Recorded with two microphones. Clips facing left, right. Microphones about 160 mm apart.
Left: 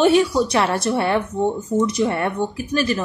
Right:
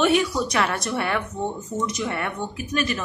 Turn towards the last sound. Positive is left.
turn(degrees=35)  # may be behind; listen again after turning